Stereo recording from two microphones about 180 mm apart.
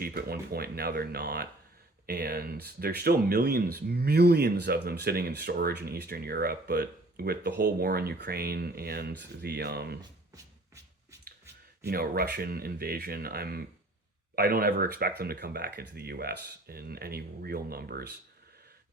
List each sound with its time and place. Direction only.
0.0 s speech: 55° right (ahead or behind)
11.9 s speech: 60° right (ahead or behind)